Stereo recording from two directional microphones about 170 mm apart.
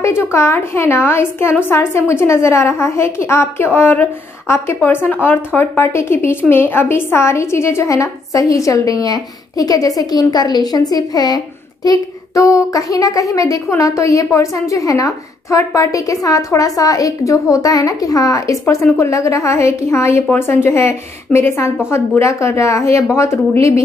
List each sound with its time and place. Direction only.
0.0 s a woman's voice: 15° left (ahead or behind)